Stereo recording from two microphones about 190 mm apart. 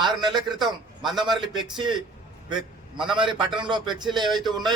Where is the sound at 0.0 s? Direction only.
25° right (ahead or behind).